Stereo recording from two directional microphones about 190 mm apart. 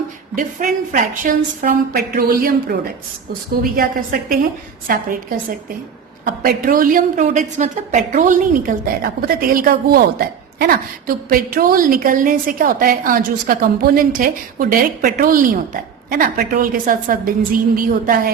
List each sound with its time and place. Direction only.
0.6 s a woman's voice: 45° right (ahead or behind)
6.2 s a woman's voice: 50° right (ahead or behind)